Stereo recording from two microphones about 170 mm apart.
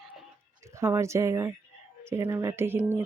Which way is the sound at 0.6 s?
15° right (ahead or behind).